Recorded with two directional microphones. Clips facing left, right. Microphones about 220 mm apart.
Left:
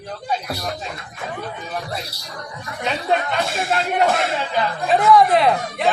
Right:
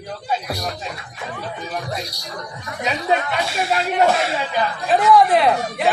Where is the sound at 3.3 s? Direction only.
5° right (ahead or behind).